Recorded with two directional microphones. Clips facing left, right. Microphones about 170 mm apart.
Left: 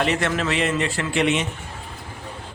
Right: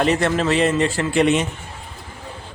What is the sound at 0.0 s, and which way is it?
A man's voice, 35° right (ahead or behind).